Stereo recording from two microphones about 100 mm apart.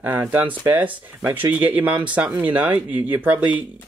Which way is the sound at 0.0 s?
15° right (ahead or behind).